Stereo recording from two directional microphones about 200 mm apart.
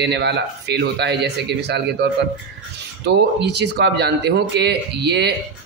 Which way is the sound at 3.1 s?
60° right (ahead or behind).